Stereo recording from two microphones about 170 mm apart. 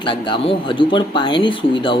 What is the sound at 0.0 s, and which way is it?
Speech, 30° left (ahead or behind).